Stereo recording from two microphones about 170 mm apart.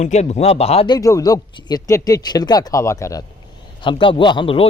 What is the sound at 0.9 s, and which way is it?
Speech, 20° left (ahead or behind).